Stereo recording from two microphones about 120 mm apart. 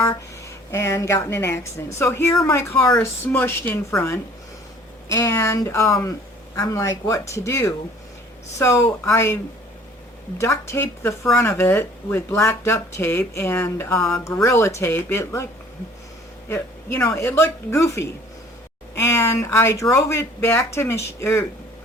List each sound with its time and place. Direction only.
0.7 s speech: 25° left (ahead or behind)
16.5 s speech: 25° left (ahead or behind)